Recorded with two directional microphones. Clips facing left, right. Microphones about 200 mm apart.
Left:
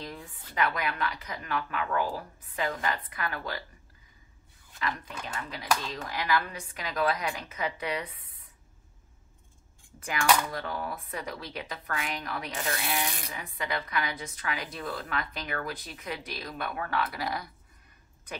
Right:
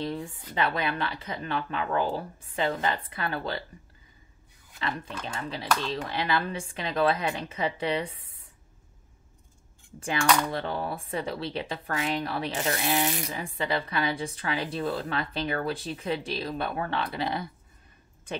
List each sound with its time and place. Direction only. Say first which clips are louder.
0.0 s speech: right 9 dB; 25° right (ahead or behind)
4.7 s speech: right 1 dB; 30° right (ahead or behind)
10.5 s speech: right 4 dB; 30° right (ahead or behind)